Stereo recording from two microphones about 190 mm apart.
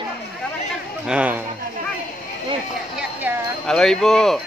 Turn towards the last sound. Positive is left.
turn(degrees=0)  # may be behind; listen again after turning